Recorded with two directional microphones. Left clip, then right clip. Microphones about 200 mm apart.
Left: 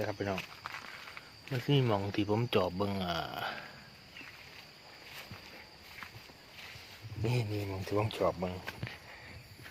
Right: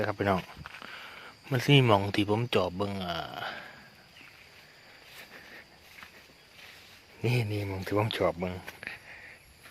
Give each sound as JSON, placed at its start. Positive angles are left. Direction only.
{"t": 0.0, "sound": "speech", "side_deg": -50}
{"t": 1.5, "sound": "speech", "side_deg": -45}
{"t": 7.2, "sound": "speech", "side_deg": -45}